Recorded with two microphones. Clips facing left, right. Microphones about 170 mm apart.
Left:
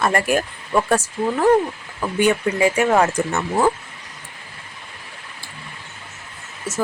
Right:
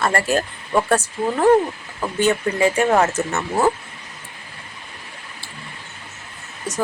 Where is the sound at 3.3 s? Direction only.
5° right (ahead or behind).